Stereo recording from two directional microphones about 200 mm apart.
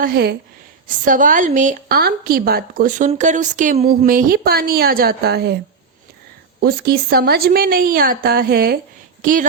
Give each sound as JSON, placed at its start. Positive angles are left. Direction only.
{"t": 0.0, "sound": "a woman's voice", "side_deg": -50}
{"t": 6.6, "sound": "a woman's voice", "side_deg": -50}